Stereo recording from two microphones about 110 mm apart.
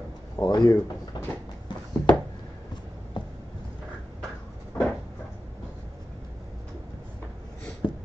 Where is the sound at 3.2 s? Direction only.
45° left (ahead or behind).